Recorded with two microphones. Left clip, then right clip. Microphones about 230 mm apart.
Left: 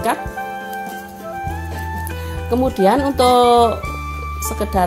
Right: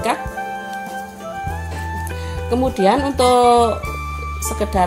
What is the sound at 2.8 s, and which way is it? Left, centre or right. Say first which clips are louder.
Speech: left 1 dB; centre.